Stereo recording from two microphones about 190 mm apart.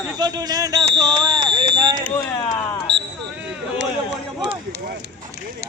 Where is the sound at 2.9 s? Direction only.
65° right (ahead or behind).